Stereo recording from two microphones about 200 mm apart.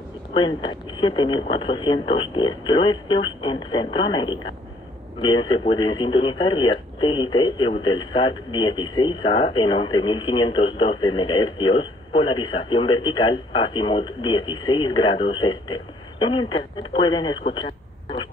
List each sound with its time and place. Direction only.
0.3 s speech: 25° left (ahead or behind)